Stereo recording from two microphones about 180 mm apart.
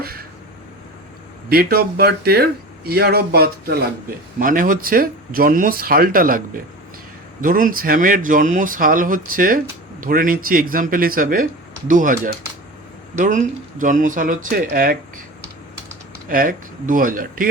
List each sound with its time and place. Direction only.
0.0 s a sound: 55° right (ahead or behind)
1.5 s speech: 55° right (ahead or behind)
4.4 s speech: 50° right (ahead or behind)
7.4 s speech: 50° right (ahead or behind)
16.3 s speech: 50° right (ahead or behind)